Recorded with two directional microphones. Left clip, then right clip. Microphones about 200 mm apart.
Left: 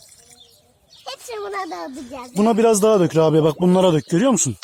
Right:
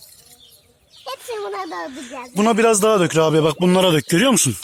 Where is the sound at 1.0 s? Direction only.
30° left (ahead or behind).